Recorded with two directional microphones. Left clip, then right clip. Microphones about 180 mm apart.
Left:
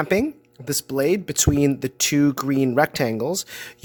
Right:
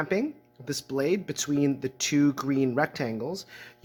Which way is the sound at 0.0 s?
60° left (ahead or behind).